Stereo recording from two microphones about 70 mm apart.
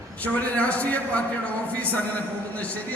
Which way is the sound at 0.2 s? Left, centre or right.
Left.